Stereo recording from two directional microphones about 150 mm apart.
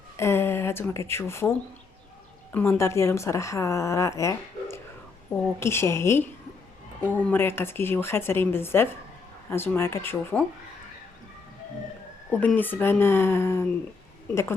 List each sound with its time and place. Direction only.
0.2 s a woman's voice: 15° left (ahead or behind)
12.3 s speech: 10° left (ahead or behind)